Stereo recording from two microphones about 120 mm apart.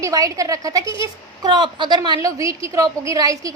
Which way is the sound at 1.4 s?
40° right (ahead or behind).